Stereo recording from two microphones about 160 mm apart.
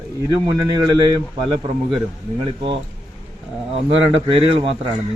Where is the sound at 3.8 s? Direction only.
35° right (ahead or behind).